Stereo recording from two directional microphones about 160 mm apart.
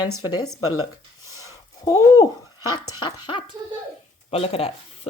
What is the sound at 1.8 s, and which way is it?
Speech, 20° left (ahead or behind).